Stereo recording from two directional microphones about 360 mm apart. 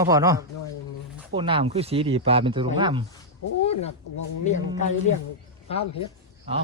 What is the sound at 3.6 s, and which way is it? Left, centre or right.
Speech, centre.